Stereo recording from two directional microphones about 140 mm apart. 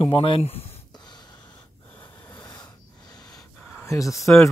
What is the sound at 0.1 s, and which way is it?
Speech, 40° left (ahead or behind).